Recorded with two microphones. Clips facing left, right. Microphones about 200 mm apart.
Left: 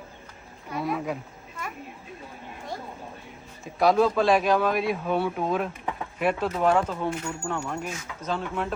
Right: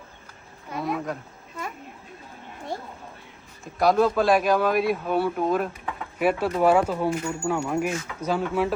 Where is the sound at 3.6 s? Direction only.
Centre (ahead or behind).